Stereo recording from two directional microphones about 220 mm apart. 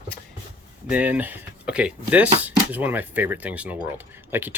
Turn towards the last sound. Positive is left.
turn(degrees=-10)  # may be behind; listen again after turning